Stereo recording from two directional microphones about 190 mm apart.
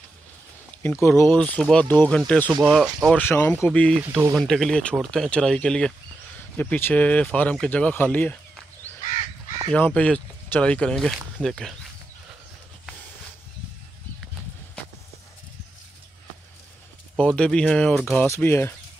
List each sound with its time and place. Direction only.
0.8 s speech: 15° left (ahead or behind)
4.0 s speech: 10° right (ahead or behind)
4.4 s speech: 5° left (ahead or behind)
9.7 s speech: 10° left (ahead or behind)
17.2 s speech: 5° left (ahead or behind)